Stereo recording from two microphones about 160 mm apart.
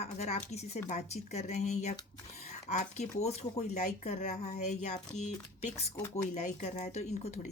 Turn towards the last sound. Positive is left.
turn(degrees=45)  # may be behind; listen again after turning